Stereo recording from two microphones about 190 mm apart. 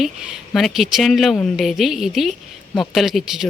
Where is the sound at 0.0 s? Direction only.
Centre (ahead or behind).